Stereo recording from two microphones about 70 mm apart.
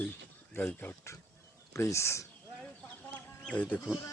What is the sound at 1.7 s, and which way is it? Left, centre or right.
Speech, left.